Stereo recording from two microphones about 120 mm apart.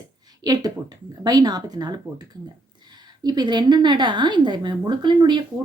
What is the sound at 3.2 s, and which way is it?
A woman's voice, 35° right (ahead or behind).